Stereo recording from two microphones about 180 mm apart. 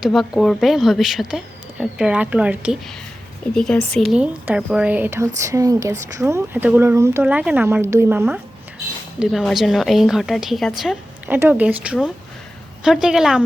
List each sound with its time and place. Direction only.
0.0 s a woman's voice: centre (ahead or behind)
3.5 s a woman's voice: 5° left (ahead or behind); by 8.4 s 10° right (ahead or behind)
9.1 s a woman's voice: centre (ahead or behind)